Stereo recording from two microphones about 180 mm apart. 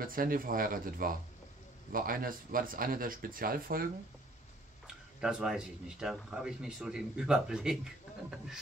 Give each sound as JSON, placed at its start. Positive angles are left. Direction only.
{"t": 0.0, "sound": "speech", "side_deg": -50}
{"t": 4.8, "sound": "speech", "side_deg": -5}